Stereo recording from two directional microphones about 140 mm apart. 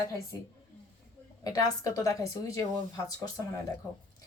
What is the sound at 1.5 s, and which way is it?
Speech, 25° left (ahead or behind).